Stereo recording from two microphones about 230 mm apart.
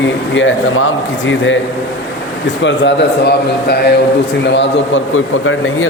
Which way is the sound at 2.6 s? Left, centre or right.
Left.